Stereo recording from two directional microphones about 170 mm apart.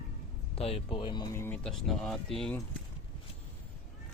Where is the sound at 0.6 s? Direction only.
35° left (ahead or behind).